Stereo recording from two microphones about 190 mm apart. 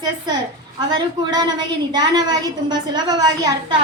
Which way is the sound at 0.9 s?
20° right (ahead or behind).